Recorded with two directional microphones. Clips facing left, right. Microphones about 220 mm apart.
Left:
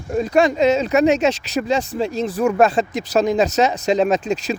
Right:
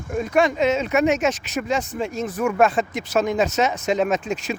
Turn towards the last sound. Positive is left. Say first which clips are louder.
# left 4 dB
turn(degrees=35)  # may be behind; listen again after turning